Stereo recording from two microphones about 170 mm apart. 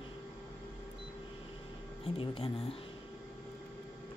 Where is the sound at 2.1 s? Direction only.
35° left (ahead or behind).